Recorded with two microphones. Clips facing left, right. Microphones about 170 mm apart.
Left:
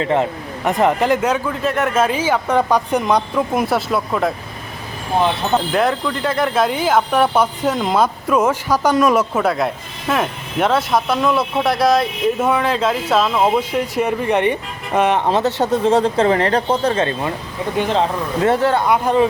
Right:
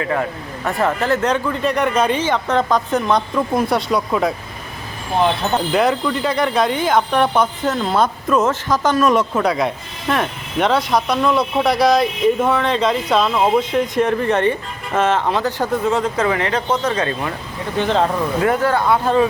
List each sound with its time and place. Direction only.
0.0 s speech: 25° left (ahead or behind); by 4.4 s centre (ahead or behind)
5.5 s speech: centre (ahead or behind); by 17.3 s 25° left (ahead or behind)
17.7 s speech: 5° left (ahead or behind)
18.4 s speech: 25° left (ahead or behind)